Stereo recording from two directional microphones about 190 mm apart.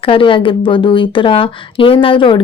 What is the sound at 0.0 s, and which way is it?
A woman's voice, 30° left (ahead or behind).